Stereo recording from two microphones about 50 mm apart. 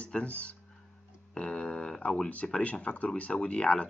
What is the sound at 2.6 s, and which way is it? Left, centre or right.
Speech, left.